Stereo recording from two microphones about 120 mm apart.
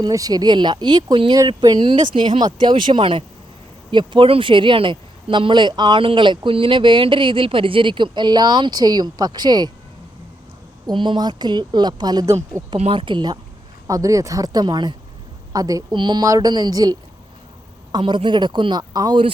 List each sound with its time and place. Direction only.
0.0 s speech: 30° right (ahead or behind)
10.8 s speech: 40° right (ahead or behind)
12.7 s speech: 50° right (ahead or behind)
13.8 s speech: 25° right (ahead or behind)